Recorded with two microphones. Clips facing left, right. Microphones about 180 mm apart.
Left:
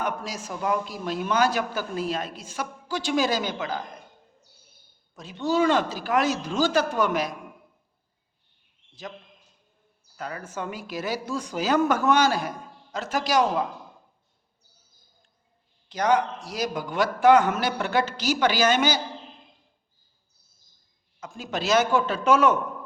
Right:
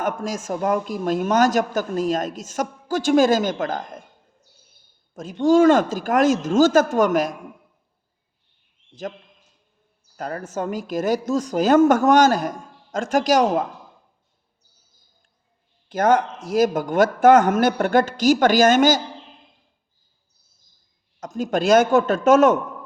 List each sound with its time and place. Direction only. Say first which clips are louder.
0.0 s speech: right 5 dB; 45° right (ahead or behind)
5.1 s speech: right 9 dB; 45° right (ahead or behind)
8.9 s a man's voice: right 8 dB; 45° right (ahead or behind)
10.2 s speech: right 6 dB; 45° right (ahead or behind)
15.9 s speech: right 4 dB; 50° right (ahead or behind)
21.2 s speech: right 9 dB; 45° right (ahead or behind)